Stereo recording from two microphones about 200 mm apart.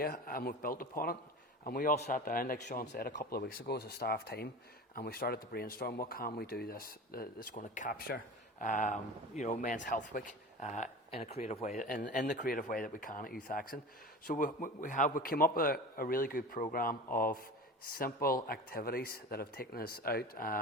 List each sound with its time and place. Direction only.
0.0 s a man's voice: 45° left (ahead or behind)